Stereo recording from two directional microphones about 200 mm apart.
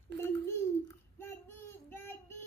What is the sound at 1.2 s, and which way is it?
Child singing, 10° left (ahead or behind).